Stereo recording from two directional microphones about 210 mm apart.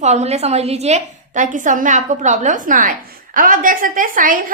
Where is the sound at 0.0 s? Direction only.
35° right (ahead or behind).